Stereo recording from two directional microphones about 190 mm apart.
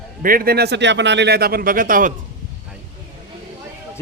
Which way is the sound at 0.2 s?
50° right (ahead or behind).